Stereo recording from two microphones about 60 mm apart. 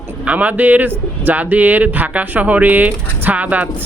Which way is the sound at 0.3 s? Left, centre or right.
Right.